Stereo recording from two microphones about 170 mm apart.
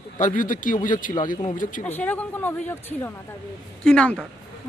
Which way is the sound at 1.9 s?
10° left (ahead or behind).